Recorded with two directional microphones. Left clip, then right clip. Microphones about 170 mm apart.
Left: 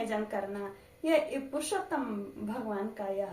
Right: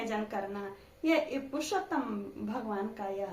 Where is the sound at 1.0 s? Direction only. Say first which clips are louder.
Left 1 dB; 20° right (ahead or behind).